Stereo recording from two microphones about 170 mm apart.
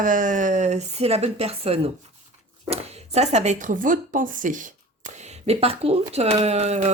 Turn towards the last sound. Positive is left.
turn(degrees=-40)  # may be behind; listen again after turning